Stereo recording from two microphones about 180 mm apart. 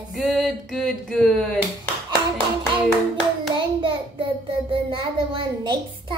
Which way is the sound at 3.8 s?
25° right (ahead or behind).